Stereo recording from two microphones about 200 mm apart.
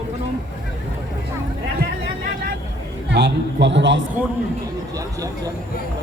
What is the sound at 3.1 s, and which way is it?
Speech, 60° right (ahead or behind).